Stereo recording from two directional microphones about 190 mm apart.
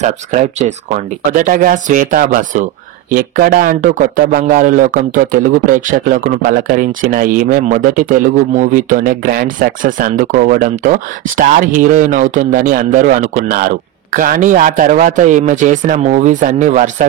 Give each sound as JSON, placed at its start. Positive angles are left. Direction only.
{"t": 0.0, "sound": "speech", "side_deg": -40}